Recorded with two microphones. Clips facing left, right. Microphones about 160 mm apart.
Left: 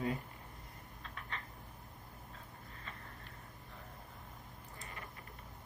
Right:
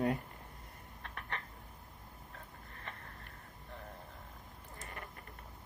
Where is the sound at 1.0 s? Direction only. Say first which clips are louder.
Right 3 dB; 60° right (ahead or behind).